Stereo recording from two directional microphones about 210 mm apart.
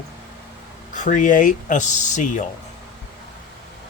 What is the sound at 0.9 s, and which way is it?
Speech, 35° left (ahead or behind).